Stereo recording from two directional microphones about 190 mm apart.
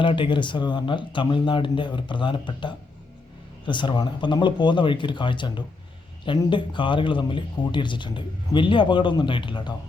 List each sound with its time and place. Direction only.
0.0 s speech: 25° left (ahead or behind)